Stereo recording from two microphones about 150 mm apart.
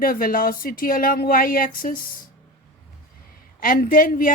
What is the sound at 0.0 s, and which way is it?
Speech, 70° left (ahead or behind).